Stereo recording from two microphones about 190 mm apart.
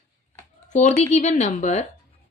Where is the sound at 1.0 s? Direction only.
35° left (ahead or behind).